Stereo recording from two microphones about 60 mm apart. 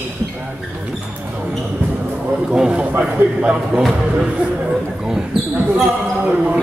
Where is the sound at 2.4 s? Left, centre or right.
Centre.